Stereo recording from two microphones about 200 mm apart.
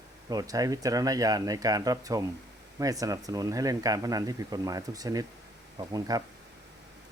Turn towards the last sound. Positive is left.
turn(degrees=-20)  # may be behind; listen again after turning